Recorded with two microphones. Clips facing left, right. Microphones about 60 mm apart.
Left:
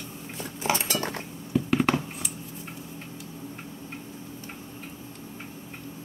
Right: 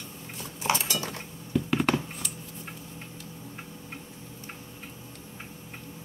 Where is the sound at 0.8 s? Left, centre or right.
Left.